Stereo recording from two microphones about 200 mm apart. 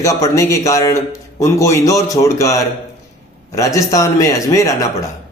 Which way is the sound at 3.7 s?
15° left (ahead or behind).